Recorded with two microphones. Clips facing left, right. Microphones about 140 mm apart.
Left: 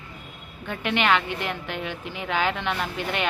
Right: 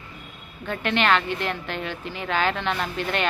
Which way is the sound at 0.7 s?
10° left (ahead or behind).